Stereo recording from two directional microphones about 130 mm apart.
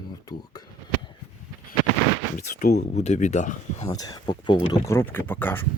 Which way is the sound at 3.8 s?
30° left (ahead or behind).